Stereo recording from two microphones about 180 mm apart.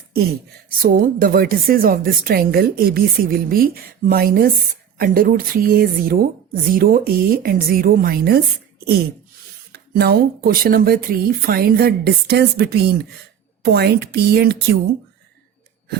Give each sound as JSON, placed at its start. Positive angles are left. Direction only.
{"t": 0.8, "sound": "speech", "side_deg": -55}
{"t": 9.7, "sound": "speech", "side_deg": -60}